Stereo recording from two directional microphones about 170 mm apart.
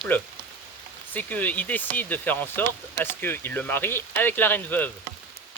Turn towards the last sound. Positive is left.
turn(degrees=10)  # may be behind; listen again after turning